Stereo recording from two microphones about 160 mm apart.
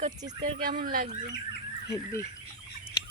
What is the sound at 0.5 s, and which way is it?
Speech, 60° right (ahead or behind).